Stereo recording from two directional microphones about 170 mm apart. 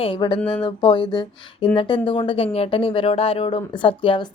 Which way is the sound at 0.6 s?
30° left (ahead or behind).